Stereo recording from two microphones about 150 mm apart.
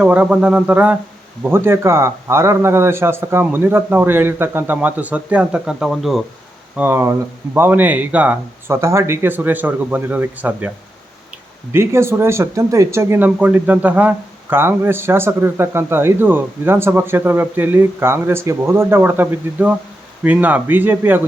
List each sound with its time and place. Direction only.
0.0 s speech: 10° right (ahead or behind)
6.7 s speech: 15° right (ahead or behind)
11.7 s speech: 15° right (ahead or behind)